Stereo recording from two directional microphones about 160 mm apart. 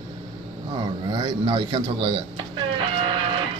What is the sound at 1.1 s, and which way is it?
Speech, 30° right (ahead or behind).